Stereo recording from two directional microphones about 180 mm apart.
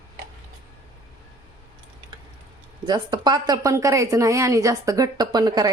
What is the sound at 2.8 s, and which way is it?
Speech, 25° right (ahead or behind).